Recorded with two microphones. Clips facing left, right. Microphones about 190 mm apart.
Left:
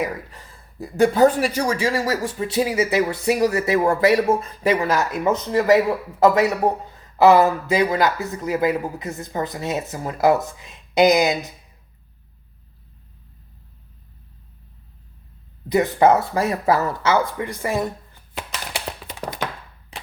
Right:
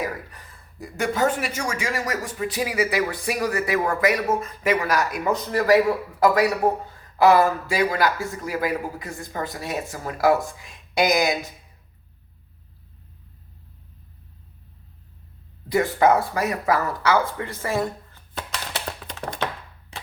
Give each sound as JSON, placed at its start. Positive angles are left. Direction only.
{"t": 0.0, "sound": "speech", "side_deg": 25}
{"t": 15.7, "sound": "speech", "side_deg": 20}